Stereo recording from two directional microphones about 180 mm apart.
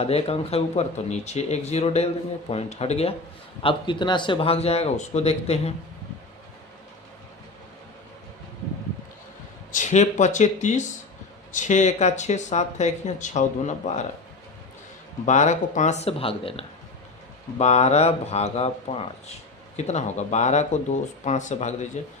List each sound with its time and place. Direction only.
0.0 s speech: 35° left (ahead or behind)
9.7 s speech: 40° left (ahead or behind)
15.3 s speech: 40° left (ahead or behind)